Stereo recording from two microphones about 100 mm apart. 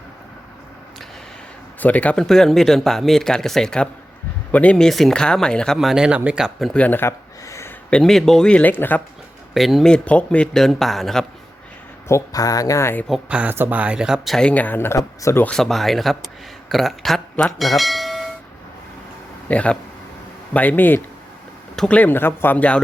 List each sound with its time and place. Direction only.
1.8 s speech: 15° left (ahead or behind); by 6.7 s centre (ahead or behind)
6.7 s speech: 15° left (ahead or behind)
7.4 s a sound: 30° left (ahead or behind)
7.9 s speech: 5° left (ahead or behind)
9.6 s speech: centre (ahead or behind)
9.9 s speech: 10° left (ahead or behind)
12.0 s speech: 35° left (ahead or behind)
13.2 s speech: 15° right (ahead or behind)
14.3 s speech: 15° left (ahead or behind); by 15.4 s 30° left (ahead or behind)
15.4 s speech: 5° left (ahead or behind)
19.5 s speech: 15° left (ahead or behind)